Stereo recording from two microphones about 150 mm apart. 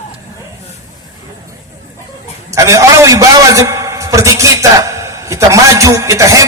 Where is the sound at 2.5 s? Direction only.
20° right (ahead or behind).